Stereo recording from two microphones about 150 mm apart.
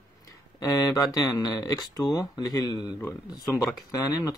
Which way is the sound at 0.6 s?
20° left (ahead or behind).